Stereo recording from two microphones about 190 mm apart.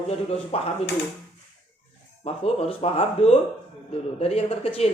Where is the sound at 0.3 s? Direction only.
30° left (ahead or behind).